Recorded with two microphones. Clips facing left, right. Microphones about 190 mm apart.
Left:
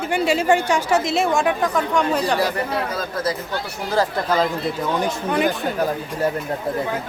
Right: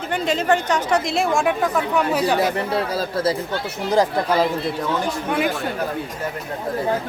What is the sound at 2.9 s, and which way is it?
Speech, 30° right (ahead or behind).